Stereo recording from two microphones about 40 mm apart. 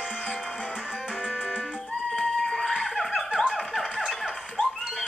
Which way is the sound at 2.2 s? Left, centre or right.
Centre.